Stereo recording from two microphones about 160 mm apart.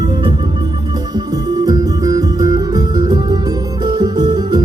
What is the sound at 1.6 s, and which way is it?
Music, 20° right (ahead or behind).